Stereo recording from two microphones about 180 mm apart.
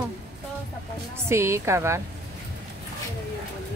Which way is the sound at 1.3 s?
15° right (ahead or behind).